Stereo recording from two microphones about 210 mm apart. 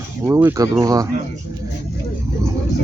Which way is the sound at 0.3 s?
10° right (ahead or behind).